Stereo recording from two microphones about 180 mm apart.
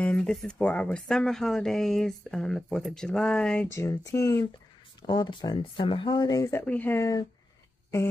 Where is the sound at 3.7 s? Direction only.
15° left (ahead or behind).